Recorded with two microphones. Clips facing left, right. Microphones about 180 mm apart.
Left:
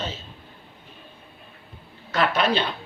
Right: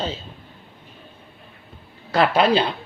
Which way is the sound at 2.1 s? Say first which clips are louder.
Right 5 dB; 30° right (ahead or behind).